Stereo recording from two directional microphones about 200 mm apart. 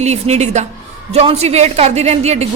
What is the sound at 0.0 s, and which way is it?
A woman's voice, 35° right (ahead or behind).